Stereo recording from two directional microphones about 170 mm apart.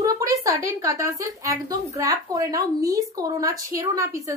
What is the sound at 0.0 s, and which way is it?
A woman's voice, 20° right (ahead or behind).